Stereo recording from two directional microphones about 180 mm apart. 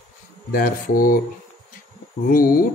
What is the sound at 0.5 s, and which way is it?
Speech, 50° left (ahead or behind).